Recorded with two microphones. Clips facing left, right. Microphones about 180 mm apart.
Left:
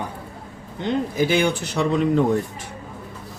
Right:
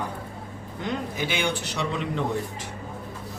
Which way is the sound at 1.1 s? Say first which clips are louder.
Left 10 dB; 40° left (ahead or behind).